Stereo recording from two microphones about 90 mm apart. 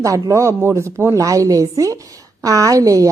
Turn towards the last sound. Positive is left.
turn(degrees=-40)  # may be behind; listen again after turning